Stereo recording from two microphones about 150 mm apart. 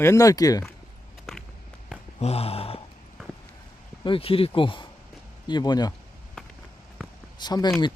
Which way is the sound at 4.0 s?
35° left (ahead or behind).